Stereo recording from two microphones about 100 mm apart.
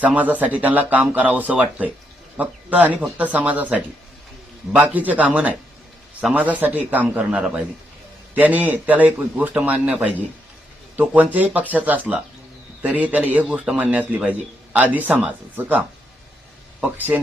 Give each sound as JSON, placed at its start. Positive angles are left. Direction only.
{"t": 0.0, "sound": "a man's voice", "side_deg": -15}
{"t": 16.8, "sound": "a man's voice", "side_deg": -15}